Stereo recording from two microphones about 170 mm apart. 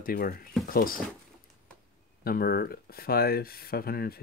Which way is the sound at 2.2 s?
65° left (ahead or behind).